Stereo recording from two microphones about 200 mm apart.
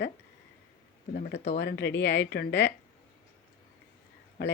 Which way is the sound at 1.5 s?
60° left (ahead or behind).